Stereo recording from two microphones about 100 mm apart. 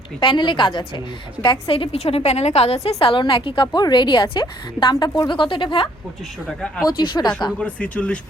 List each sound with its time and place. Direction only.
0.2 s a woman's voice: 50° left (ahead or behind); by 2.9 s 90° left
3.0 s a woman's voice: 60° left (ahead or behind)
7.6 s speech: 10° left (ahead or behind)